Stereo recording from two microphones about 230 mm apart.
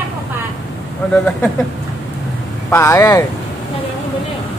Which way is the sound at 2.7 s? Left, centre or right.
Centre.